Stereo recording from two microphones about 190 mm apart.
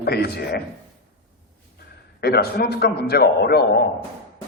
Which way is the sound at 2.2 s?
55° left (ahead or behind).